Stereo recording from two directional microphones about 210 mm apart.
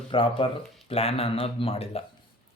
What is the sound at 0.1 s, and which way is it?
Speech, 25° left (ahead or behind).